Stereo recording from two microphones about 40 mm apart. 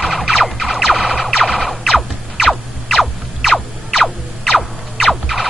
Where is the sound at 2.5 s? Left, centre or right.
Centre.